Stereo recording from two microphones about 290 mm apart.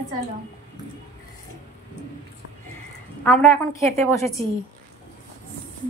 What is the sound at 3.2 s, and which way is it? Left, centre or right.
A woman's voice, centre.